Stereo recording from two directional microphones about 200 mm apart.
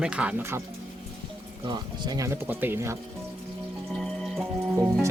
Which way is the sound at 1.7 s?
20° right (ahead or behind).